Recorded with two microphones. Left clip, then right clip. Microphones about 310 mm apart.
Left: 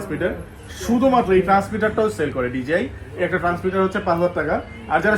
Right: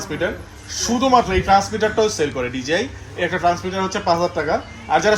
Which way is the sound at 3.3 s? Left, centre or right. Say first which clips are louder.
Right 3 dB; right.